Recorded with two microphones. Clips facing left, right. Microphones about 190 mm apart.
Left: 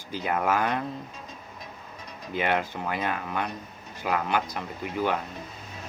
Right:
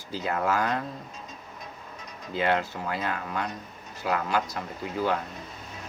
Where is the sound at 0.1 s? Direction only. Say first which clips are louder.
Left 1 dB; 15° left (ahead or behind).